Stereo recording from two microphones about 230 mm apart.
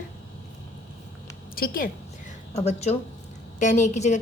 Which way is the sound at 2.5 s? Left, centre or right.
Left.